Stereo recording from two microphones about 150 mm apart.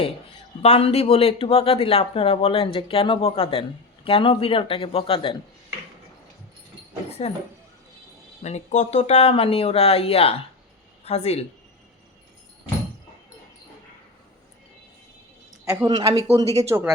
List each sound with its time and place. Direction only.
0.6 s speech: 45° left (ahead or behind)
7.2 s speech: 45° left (ahead or behind)
8.4 s speech: 50° left (ahead or behind)
15.7 s speech: 25° right (ahead or behind)
16.0 s speech: 40° right (ahead or behind)